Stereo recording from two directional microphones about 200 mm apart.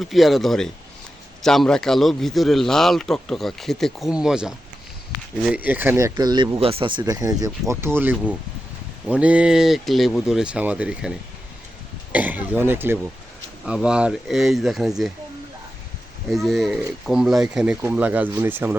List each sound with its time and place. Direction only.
0.0 s a man's voice: centre (ahead or behind)
8.1 s speech: 5° left (ahead or behind)
9.0 s a man's voice: 5° right (ahead or behind)
12.1 s a man's voice: 10° right (ahead or behind)
16.3 s a man's voice: centre (ahead or behind)